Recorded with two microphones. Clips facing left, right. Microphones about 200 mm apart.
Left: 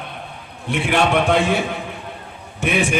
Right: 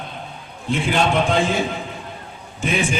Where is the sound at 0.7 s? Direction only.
65° left (ahead or behind).